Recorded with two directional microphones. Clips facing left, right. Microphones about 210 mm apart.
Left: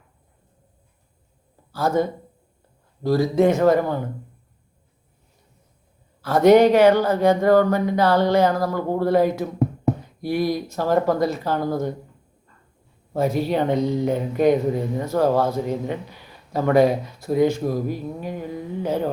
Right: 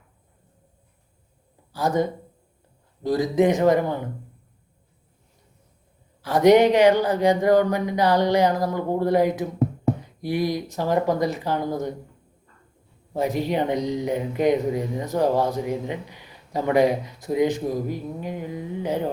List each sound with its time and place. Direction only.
1.7 s speech: 15° right (ahead or behind)
6.2 s speech: 15° right (ahead or behind)
13.1 s speech: 15° right (ahead or behind)